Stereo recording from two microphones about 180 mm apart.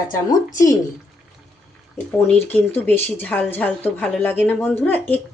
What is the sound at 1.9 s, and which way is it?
Speech, 10° left (ahead or behind).